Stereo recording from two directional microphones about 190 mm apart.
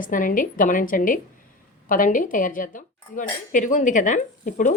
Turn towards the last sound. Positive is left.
turn(degrees=45)  # may be behind; listen again after turning